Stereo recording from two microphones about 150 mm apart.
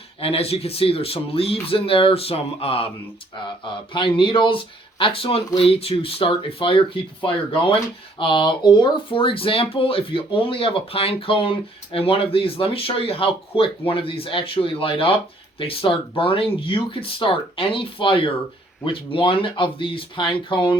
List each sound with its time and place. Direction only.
0.2 s speech: 40° left (ahead or behind)
3.9 s speech: 35° left (ahead or behind)